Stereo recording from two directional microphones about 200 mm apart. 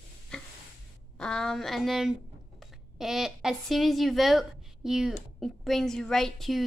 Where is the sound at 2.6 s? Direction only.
Centre (ahead or behind).